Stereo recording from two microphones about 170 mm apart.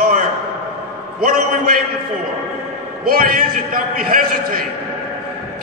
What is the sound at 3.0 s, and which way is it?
A man's voice, 55° right (ahead or behind).